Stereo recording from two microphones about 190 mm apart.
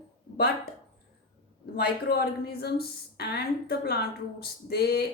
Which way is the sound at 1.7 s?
55° left (ahead or behind).